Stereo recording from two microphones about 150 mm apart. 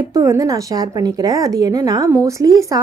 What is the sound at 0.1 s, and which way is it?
A woman's voice, 20° right (ahead or behind).